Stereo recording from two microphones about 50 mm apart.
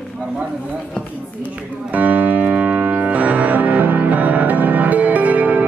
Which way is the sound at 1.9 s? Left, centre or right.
Right.